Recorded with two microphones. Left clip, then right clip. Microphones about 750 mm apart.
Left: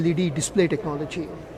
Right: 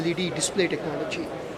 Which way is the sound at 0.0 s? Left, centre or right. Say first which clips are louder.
Left 1 dB; left.